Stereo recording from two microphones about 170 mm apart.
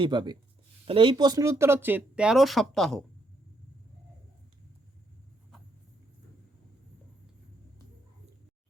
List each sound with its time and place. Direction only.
0.0 s speech: 25° right (ahead or behind); by 3.0 s centre (ahead or behind)